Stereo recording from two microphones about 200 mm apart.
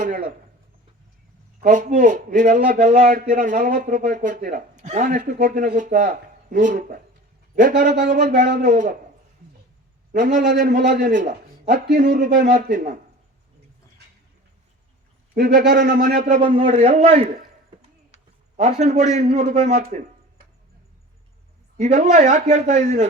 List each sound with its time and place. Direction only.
0.0 s speech: 45° right (ahead or behind)
1.6 s a man's voice: 40° right (ahead or behind)
10.3 s a man's voice: 45° right (ahead or behind)
15.4 s a man's voice: 45° right (ahead or behind)
18.8 s a man's voice: 35° right (ahead or behind)
21.8 s a man's voice: 35° right (ahead or behind)